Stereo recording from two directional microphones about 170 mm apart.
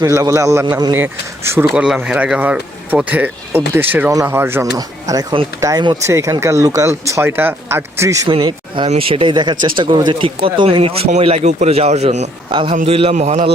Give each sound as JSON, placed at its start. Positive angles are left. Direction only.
{"t": 0.0, "sound": "speech", "side_deg": -20}
{"t": 1.7, "sound": "speech", "side_deg": -5}
{"t": 5.0, "sound": "speech", "side_deg": -25}
{"t": 8.3, "sound": "speech", "side_deg": -30}
{"t": 12.5, "sound": "a man's voice", "side_deg": -30}